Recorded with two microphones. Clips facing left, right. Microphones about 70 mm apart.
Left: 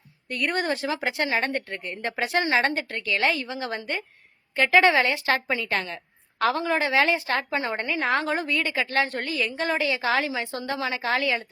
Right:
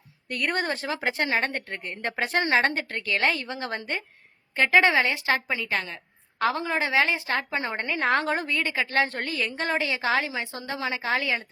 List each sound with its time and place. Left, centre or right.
0.3 s a woman's voice: right; by 5.7 s centre
6.4 s a woman's voice: right
7.9 s a woman's voice: right
8.4 s a woman's voice: right
9.5 s speech: right
9.7 s a woman's voice: right